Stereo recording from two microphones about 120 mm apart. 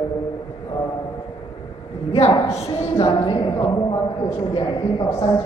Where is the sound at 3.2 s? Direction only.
40° left (ahead or behind).